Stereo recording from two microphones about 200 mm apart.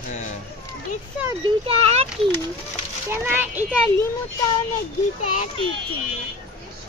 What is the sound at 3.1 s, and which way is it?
Speech, 10° right (ahead or behind).